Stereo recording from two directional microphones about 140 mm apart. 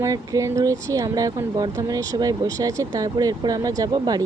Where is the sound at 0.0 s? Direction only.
25° right (ahead or behind).